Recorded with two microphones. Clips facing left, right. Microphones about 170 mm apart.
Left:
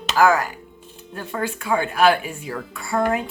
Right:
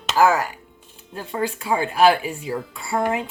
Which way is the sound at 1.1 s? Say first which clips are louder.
Right 1 dB; 25° right (ahead or behind).